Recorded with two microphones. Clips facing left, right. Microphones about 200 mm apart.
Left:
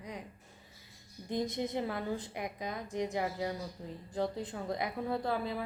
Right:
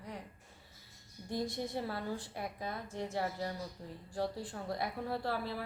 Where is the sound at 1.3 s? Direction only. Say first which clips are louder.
Left 3 dB; 20° left (ahead or behind).